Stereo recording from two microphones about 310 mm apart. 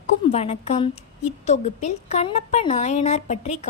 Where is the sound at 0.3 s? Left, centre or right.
Centre.